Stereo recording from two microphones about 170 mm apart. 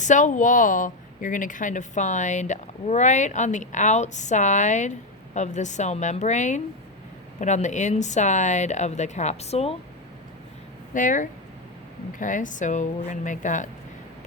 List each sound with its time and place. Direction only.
0.0 s a woman's voice: 45° left (ahead or behind)
10.9 s a woman's voice: 50° left (ahead or behind)